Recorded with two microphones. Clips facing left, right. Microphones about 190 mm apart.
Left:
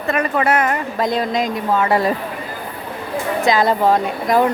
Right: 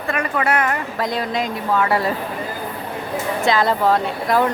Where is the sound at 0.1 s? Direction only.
25° left (ahead or behind).